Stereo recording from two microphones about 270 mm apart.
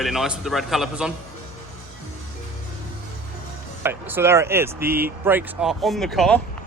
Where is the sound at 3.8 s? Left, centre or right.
Centre.